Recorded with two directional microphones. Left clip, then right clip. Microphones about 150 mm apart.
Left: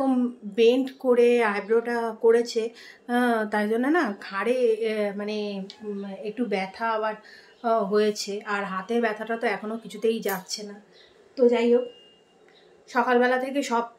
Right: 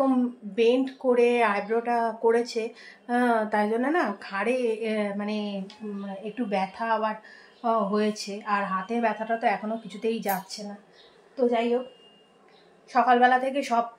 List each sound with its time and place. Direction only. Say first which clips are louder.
0.6 s a woman's voice: left 2 dB; 5° left (ahead or behind)
12.9 s speech: right 2 dB; centre (ahead or behind)